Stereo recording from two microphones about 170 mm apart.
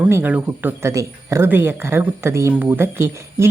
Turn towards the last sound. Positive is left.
turn(degrees=-15)  # may be behind; listen again after turning